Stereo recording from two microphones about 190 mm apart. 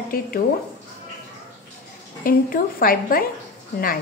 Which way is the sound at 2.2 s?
50° left (ahead or behind).